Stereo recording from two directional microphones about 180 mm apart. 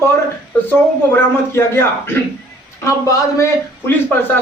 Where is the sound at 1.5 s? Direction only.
15° left (ahead or behind).